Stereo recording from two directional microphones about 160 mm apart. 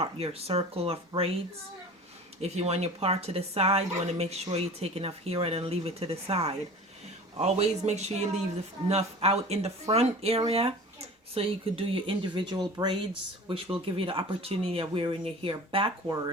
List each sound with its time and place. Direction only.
0.0 s speech: 40° right (ahead or behind)
2.4 s speech: 40° right (ahead or behind)
16.0 s speech: 20° right (ahead or behind)